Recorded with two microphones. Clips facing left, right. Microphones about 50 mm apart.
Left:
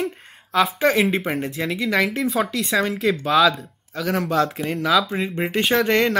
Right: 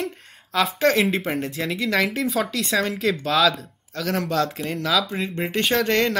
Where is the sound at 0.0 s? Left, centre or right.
Centre.